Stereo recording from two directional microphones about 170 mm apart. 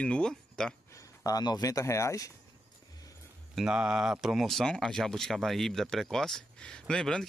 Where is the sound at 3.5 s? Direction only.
5° right (ahead or behind).